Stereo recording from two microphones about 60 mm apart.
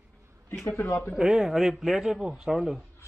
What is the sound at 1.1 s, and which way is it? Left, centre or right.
A man's voice, centre.